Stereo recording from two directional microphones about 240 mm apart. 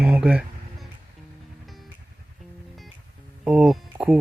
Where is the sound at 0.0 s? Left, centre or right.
Centre.